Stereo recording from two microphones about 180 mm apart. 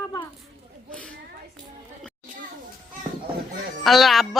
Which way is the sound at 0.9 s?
5° left (ahead or behind).